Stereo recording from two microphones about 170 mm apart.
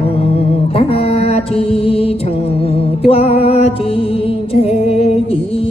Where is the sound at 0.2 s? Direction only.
35° left (ahead or behind).